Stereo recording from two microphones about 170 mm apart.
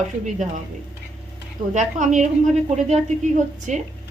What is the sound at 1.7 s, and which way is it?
A woman's voice, 45° right (ahead or behind).